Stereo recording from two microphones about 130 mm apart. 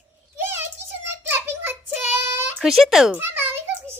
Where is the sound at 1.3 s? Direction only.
15° right (ahead or behind).